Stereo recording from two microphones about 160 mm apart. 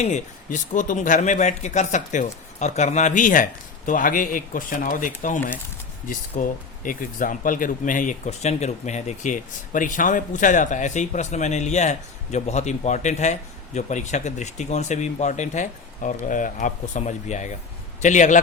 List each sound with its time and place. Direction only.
0.0 s speech: 50° left (ahead or behind)